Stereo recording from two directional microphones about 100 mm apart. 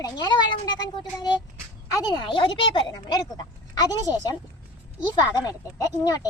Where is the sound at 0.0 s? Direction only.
45° left (ahead or behind).